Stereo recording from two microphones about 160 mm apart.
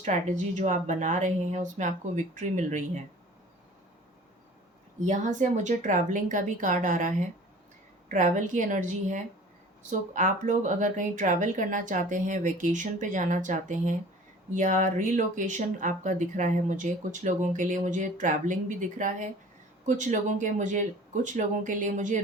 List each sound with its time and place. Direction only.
0.0 s speech: 50° right (ahead or behind)
4.9 s speech: 50° right (ahead or behind)